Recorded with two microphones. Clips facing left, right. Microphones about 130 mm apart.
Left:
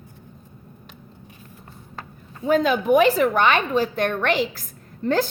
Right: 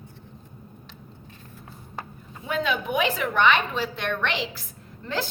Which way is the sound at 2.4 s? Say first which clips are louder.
Left 9 dB; 40° left (ahead or behind).